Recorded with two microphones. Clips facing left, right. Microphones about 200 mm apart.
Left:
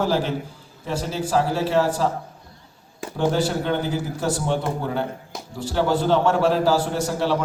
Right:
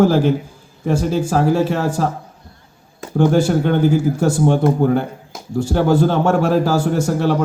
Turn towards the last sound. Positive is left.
turn(degrees=-50)  # may be behind; listen again after turning